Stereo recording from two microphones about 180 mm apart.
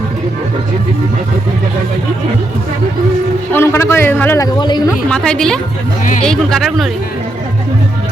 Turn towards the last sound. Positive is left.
turn(degrees=0)  # may be behind; listen again after turning